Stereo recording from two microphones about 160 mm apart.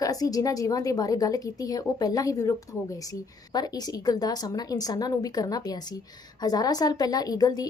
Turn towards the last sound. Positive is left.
turn(degrees=25)  # may be behind; listen again after turning